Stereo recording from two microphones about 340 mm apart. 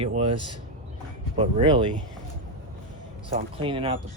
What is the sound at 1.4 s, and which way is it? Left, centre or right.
Speech, centre.